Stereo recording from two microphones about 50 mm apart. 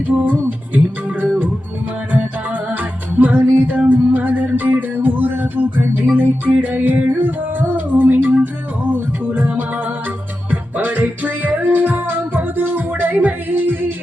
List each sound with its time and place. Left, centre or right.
0.1 s music: right